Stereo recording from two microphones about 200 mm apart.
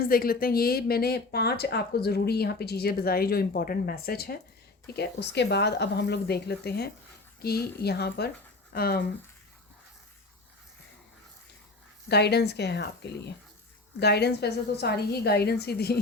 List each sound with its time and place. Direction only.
0.0 s speech: 45° left (ahead or behind)
12.0 s speech: 55° left (ahead or behind)